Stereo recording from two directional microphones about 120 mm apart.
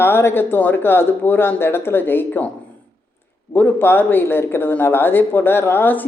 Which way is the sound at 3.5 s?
15° left (ahead or behind).